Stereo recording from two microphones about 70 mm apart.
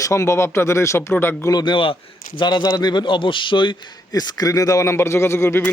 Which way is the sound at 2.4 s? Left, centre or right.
Left.